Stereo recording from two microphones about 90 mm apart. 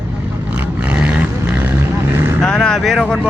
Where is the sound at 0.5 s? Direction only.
15° right (ahead or behind).